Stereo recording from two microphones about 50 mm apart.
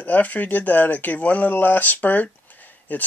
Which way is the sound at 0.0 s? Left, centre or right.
Left.